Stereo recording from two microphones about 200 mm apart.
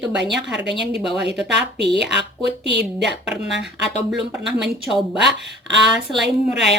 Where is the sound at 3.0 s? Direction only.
5° right (ahead or behind).